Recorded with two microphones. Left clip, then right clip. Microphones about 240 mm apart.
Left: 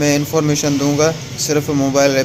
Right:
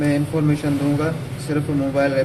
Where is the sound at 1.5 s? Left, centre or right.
Left.